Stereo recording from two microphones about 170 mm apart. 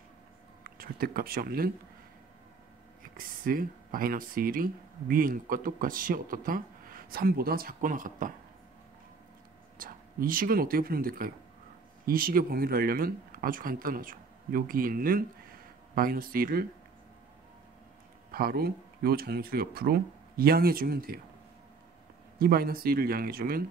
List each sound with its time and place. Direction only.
0.7 s speech: 60° right (ahead or behind)
3.0 s speech: 55° right (ahead or behind)
9.8 s speech: 55° right (ahead or behind)
18.3 s speech: 65° right (ahead or behind)
22.4 s speech: 60° right (ahead or behind)